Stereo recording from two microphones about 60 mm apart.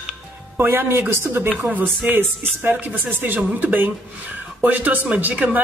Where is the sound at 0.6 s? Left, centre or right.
Right.